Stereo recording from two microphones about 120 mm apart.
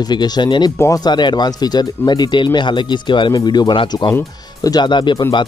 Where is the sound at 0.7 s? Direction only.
30° left (ahead or behind).